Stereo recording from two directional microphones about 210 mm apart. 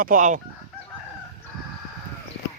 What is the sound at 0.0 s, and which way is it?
Chicken, 40° right (ahead or behind).